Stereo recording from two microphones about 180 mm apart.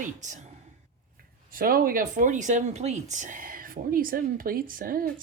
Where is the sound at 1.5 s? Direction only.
50° right (ahead or behind).